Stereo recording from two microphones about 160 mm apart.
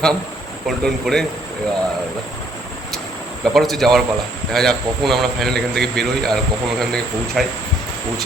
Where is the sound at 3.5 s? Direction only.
Centre (ahead or behind).